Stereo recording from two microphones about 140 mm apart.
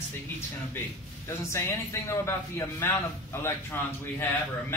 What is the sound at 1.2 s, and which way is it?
A man's voice, 20° left (ahead or behind).